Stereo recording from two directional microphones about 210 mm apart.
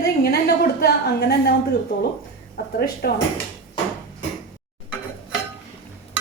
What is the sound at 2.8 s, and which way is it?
Speech, 45° left (ahead or behind).